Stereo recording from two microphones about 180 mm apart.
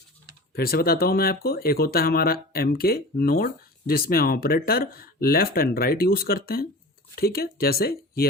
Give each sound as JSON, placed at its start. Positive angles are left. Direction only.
{"t": 0.5, "sound": "speech", "side_deg": 55}